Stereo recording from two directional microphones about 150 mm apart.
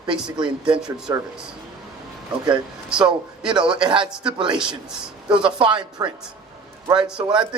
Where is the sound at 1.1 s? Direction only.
20° right (ahead or behind).